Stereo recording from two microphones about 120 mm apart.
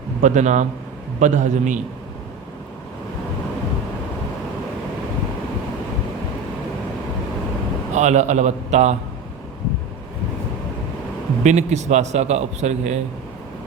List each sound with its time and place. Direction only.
0.2 s a man's voice: 80° right
7.9 s a man's voice: 80° right
11.4 s a man's voice: 75° right (ahead or behind)